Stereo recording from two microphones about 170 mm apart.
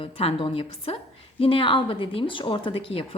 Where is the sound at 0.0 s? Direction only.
35° left (ahead or behind).